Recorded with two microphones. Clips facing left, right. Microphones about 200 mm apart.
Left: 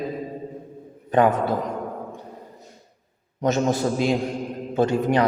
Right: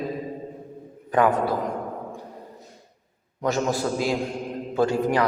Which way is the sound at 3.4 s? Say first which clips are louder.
Left 3 dB; 20° left (ahead or behind).